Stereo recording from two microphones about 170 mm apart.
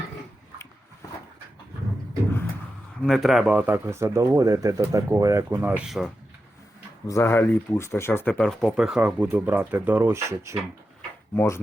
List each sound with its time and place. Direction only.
3.0 s speech: centre (ahead or behind)
7.1 s speech: 15° left (ahead or behind); by 10.6 s 15° right (ahead or behind)
11.3 s speech: 15° left (ahead or behind)